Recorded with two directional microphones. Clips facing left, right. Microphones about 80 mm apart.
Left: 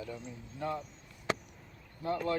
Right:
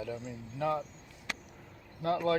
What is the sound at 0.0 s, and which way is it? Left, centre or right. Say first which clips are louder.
Speech: right 4 dB; right.